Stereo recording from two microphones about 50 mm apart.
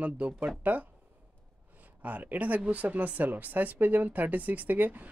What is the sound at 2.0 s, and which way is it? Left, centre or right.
Speech, right.